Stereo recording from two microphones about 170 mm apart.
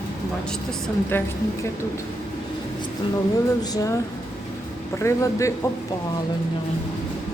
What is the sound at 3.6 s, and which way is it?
A man's voice, 20° left (ahead or behind).